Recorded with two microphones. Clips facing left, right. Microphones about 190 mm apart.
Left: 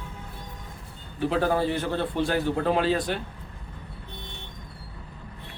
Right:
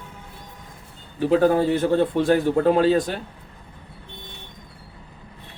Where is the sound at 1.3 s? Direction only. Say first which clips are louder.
Right 6 dB; 45° right (ahead or behind).